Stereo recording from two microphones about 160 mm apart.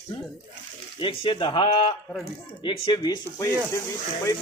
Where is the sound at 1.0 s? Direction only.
30° left (ahead or behind).